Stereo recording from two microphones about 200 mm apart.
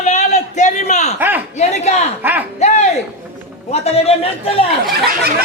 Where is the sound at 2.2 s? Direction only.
10° right (ahead or behind).